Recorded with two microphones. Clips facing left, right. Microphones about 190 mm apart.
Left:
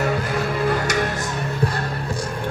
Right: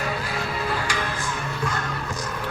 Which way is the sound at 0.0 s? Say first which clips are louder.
Left 6 dB; 50° left (ahead or behind).